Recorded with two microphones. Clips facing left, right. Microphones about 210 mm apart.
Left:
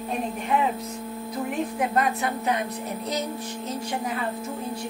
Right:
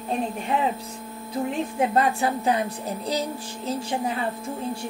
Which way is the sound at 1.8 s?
30° right (ahead or behind).